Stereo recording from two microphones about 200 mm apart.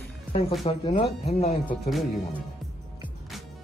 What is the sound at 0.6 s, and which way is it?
Speech, 25° left (ahead or behind).